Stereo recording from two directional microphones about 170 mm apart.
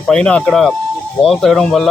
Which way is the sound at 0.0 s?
5° left (ahead or behind).